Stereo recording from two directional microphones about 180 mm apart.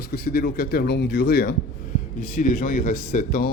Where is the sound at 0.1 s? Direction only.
60° left (ahead or behind).